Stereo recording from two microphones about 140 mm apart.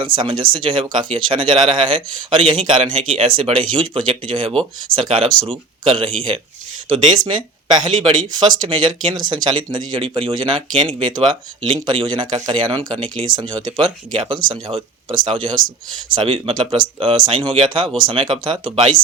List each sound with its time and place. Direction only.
0.2 s speech: 35° right (ahead or behind)